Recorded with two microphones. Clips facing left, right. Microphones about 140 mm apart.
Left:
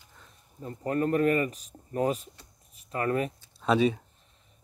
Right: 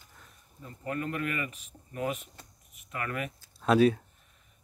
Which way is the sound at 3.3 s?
Centre (ahead or behind).